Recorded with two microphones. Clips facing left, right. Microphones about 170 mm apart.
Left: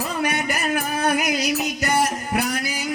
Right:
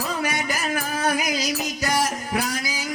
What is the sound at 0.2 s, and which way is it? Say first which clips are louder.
Music: left 2 dB; 60° left (ahead or behind).